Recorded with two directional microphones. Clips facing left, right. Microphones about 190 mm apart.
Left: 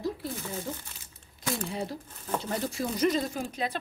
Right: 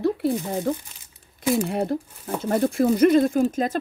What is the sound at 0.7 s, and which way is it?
A woman's voice, 65° right (ahead or behind).